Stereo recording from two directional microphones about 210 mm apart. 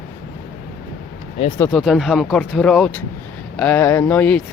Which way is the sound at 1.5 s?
10° left (ahead or behind).